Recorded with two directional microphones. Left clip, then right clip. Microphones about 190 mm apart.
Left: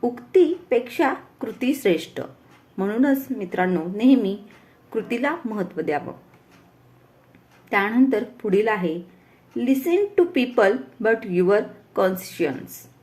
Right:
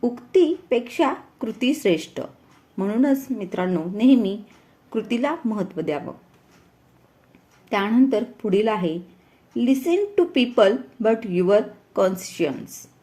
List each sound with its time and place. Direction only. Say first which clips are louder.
0.0 s a woman's voice: left 1 dB; 35° right (ahead or behind)
7.7 s speech: even; 35° right (ahead or behind)